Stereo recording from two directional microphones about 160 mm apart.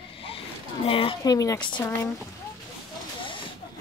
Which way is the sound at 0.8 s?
35° left (ahead or behind).